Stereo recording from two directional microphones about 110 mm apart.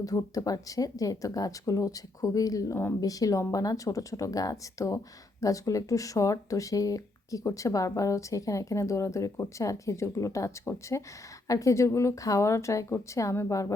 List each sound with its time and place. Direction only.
0.0 s speech: 30° left (ahead or behind)